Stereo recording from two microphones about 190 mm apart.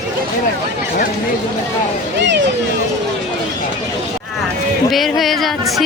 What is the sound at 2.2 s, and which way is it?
Vehicle, 65° right (ahead or behind).